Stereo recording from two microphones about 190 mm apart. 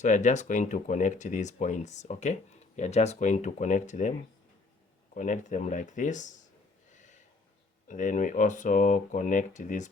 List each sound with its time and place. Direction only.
0.0 s speech: 40° left (ahead or behind)
5.1 s speech: 40° left (ahead or behind)
6.9 s snort: 40° left (ahead or behind)
7.9 s speech: 40° left (ahead or behind)